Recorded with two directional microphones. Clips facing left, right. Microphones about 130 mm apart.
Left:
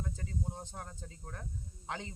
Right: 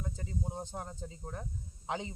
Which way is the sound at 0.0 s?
15° right (ahead or behind).